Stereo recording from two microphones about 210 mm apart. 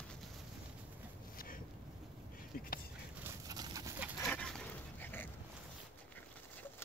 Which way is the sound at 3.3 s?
15° right (ahead or behind).